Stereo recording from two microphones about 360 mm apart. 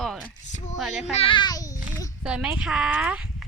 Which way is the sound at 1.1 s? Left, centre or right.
Centre.